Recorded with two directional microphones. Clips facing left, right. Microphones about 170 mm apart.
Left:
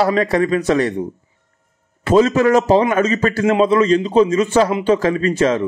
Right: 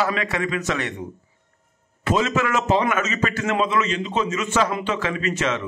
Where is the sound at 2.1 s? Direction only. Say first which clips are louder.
Left 9 dB; 35° left (ahead or behind).